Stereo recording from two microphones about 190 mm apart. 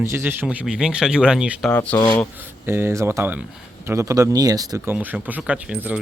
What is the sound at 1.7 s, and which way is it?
Speech, 10° left (ahead or behind).